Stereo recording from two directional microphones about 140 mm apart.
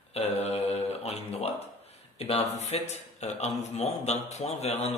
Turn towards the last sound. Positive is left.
turn(degrees=50)  # may be behind; listen again after turning